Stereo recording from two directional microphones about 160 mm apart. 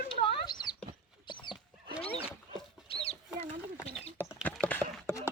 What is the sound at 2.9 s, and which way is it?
Chicken, 35° left (ahead or behind).